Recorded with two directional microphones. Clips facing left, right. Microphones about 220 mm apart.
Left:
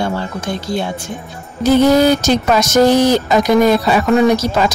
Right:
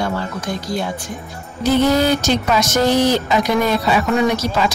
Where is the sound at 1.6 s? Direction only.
45° left (ahead or behind).